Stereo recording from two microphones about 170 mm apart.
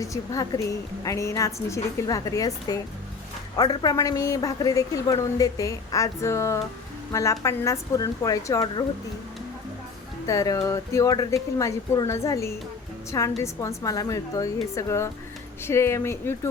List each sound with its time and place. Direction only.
0.0 s a woman's voice: 20° left (ahead or behind)
10.2 s a woman's voice: 20° left (ahead or behind)